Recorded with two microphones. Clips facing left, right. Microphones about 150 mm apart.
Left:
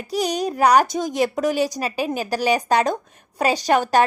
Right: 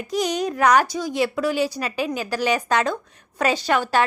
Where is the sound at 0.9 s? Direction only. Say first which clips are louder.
Left 2 dB; 50° left (ahead or behind).